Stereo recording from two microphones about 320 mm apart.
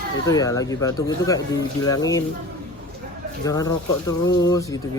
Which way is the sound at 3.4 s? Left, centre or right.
Centre.